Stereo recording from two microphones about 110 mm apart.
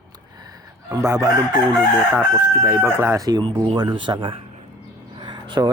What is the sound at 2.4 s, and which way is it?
Speech, 20° right (ahead or behind).